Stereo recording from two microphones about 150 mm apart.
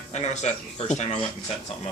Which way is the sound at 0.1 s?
50° left (ahead or behind).